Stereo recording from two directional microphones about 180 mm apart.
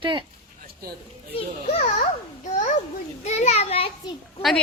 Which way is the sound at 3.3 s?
35° left (ahead or behind).